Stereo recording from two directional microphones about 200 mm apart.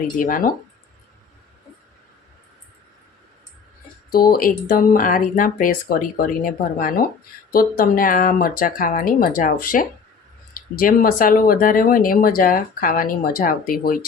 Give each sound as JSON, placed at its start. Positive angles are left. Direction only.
{"t": 0.2, "sound": "speech", "side_deg": 45}
{"t": 4.1, "sound": "speech", "side_deg": 45}